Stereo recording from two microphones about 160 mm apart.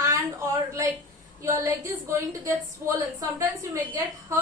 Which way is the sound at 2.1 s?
20° right (ahead or behind).